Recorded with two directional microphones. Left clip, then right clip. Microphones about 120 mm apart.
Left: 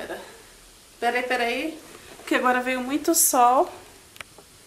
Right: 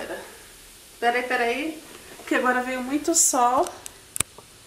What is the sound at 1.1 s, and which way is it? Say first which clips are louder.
Speech: right 1 dB; 20° left (ahead or behind).